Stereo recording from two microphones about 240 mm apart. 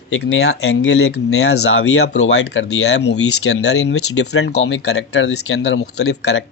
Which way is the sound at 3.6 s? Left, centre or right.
Left.